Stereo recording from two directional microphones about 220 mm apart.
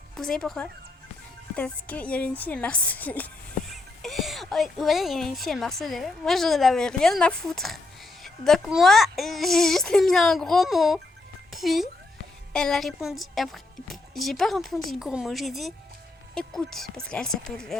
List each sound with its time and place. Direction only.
0.2 s a woman's voice: centre (ahead or behind)